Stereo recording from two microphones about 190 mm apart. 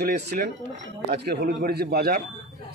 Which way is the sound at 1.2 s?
60° right (ahead or behind).